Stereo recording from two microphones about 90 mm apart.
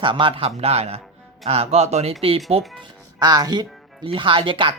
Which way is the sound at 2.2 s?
90° right.